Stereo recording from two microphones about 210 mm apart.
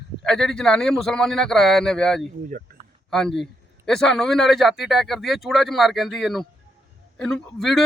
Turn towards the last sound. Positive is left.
turn(degrees=0)  # may be behind; listen again after turning